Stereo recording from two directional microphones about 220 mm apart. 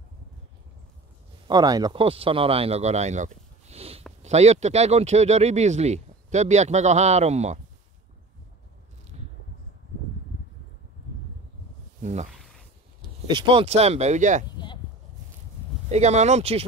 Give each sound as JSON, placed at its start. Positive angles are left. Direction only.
{"t": 1.5, "sound": "speech", "side_deg": -15}
{"t": 9.1, "sound": "a sound", "side_deg": -30}
{"t": 12.0, "sound": "speech", "side_deg": -30}
{"t": 13.3, "sound": "speech", "side_deg": -20}
{"t": 15.9, "sound": "speech", "side_deg": -30}